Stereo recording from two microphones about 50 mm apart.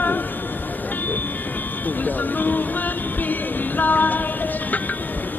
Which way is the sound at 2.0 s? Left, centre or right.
Left.